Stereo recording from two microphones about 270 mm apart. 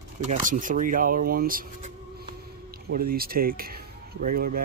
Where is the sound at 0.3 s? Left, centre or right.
Right.